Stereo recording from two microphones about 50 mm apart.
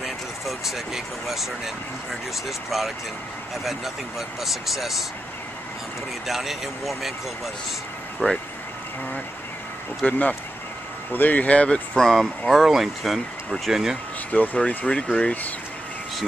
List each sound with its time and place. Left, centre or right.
0.0 s speech: centre
4.4 s speech: centre
6.2 s speech: centre
8.2 s speech: centre
10.0 s speech: left
12.0 s speech: centre
14.3 s speech: left
14.9 s speech: left